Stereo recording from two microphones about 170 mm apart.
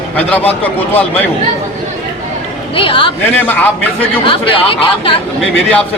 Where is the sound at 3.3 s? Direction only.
10° left (ahead or behind).